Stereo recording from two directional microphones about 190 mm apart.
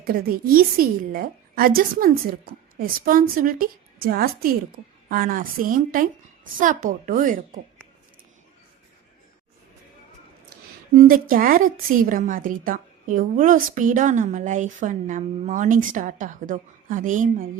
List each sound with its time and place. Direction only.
0.0 s a woman's voice: 50° right (ahead or behind)
10.9 s a woman's voice: 45° right (ahead or behind)